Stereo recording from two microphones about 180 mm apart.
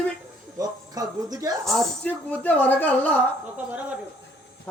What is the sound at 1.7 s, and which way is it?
Speech, 5° left (ahead or behind).